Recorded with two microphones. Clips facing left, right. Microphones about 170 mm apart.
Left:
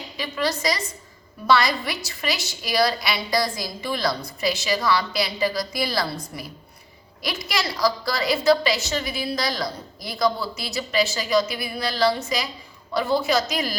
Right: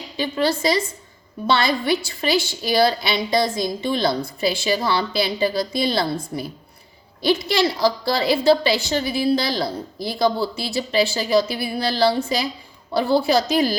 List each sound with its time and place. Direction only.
0.2 s a woman's voice: 30° right (ahead or behind)